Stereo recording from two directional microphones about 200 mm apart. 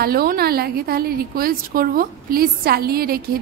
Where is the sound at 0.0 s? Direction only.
50° right (ahead or behind).